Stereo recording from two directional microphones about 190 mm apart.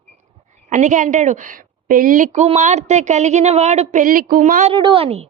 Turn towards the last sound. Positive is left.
turn(degrees=-30)  # may be behind; listen again after turning